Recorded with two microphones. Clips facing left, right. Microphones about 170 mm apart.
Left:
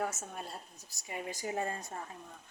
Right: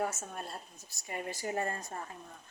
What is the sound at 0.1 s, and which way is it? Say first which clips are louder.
A woman's voice: right 1 dB; 5° left (ahead or behind).